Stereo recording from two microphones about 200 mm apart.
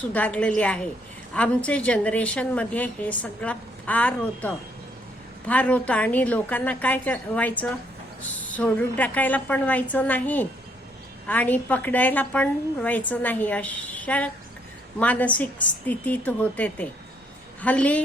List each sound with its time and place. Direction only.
0.1 s a woman's voice: 5° left (ahead or behind)